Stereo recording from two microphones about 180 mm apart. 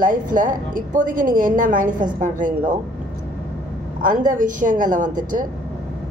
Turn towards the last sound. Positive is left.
turn(degrees=-50)  # may be behind; listen again after turning